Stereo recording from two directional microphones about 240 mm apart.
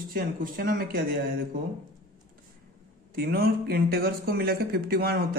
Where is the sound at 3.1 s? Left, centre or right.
Right.